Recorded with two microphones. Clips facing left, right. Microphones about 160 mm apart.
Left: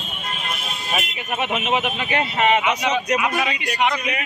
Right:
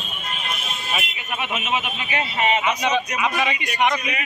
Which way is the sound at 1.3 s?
50° left (ahead or behind).